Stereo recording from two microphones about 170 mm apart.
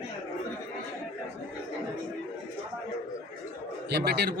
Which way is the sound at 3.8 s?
70° right (ahead or behind).